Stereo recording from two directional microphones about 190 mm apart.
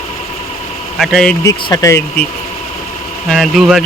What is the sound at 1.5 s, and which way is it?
Speech, 15° left (ahead or behind).